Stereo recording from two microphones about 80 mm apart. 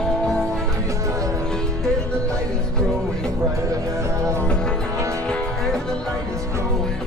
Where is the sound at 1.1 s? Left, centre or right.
Right.